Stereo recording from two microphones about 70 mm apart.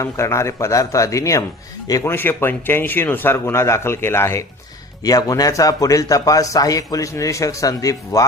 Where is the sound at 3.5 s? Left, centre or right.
Left.